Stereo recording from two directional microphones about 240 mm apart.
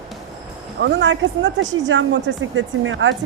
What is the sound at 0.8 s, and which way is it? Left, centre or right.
Speech, right.